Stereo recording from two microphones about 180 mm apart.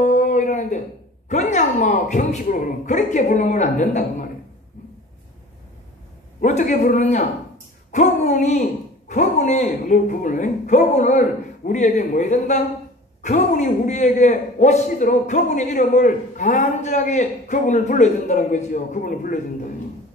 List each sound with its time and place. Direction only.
0.0 s a sound: 45° left (ahead or behind)
1.3 s a man's voice: 40° left (ahead or behind)
6.4 s a man's voice: 45° left (ahead or behind)